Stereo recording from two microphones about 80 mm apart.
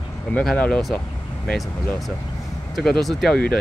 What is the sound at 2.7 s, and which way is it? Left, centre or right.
Speech, centre.